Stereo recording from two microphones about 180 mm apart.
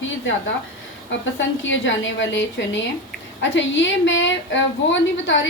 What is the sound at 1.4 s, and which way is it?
A woman's voice, 90° left.